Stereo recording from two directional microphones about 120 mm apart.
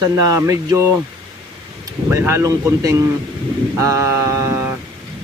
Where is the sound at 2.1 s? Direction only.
25° right (ahead or behind).